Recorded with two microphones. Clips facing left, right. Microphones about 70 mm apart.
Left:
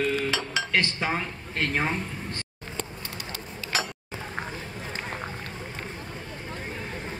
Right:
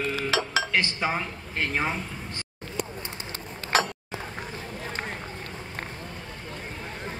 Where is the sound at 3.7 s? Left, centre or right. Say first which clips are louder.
Right 6 dB; right.